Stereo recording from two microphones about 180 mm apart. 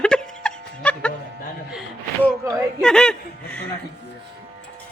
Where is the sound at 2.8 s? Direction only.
5° left (ahead or behind).